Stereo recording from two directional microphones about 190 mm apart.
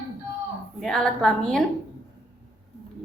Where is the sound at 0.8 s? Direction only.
Centre (ahead or behind).